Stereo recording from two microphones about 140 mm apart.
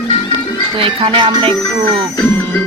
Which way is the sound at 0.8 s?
35° right (ahead or behind).